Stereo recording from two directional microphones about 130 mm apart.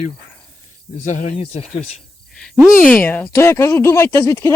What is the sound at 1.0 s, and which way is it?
Speech, 80° left.